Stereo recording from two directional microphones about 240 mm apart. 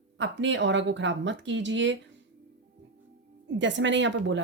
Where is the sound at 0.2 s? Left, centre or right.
Right.